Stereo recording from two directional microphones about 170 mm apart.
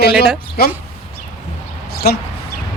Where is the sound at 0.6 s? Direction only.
65° left (ahead or behind).